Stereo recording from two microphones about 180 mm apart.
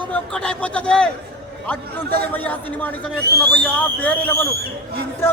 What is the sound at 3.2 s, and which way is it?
Speech, 65° right (ahead or behind).